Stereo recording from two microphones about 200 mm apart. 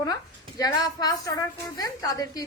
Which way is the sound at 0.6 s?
20° left (ahead or behind).